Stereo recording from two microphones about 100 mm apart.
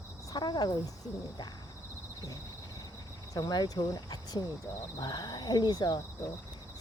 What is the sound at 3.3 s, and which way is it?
Speech, 40° left (ahead or behind).